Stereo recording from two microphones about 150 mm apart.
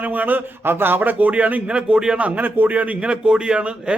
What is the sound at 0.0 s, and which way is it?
Speech, 10° right (ahead or behind).